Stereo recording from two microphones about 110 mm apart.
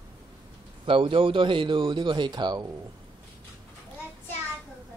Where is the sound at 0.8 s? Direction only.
50° right (ahead or behind).